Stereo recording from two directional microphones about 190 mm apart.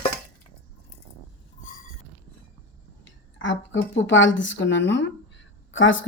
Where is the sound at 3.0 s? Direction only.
75° left (ahead or behind).